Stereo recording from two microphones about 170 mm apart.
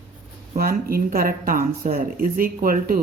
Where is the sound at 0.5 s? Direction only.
60° right (ahead or behind).